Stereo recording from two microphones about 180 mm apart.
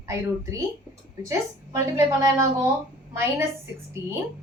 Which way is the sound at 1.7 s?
15° right (ahead or behind).